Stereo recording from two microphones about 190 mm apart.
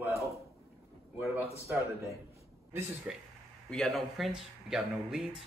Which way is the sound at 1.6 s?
15° right (ahead or behind).